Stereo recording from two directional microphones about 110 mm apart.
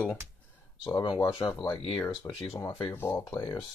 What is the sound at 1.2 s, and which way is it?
Speech, 35° left (ahead or behind).